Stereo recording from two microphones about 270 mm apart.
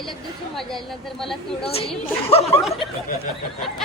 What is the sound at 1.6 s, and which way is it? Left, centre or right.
Speech, left.